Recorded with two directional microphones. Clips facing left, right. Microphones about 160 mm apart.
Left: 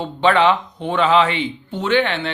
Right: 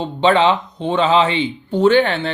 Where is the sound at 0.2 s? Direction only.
25° right (ahead or behind).